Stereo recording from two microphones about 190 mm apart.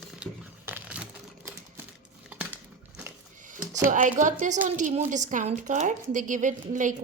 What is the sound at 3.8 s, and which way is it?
A woman's voice, 45° right (ahead or behind).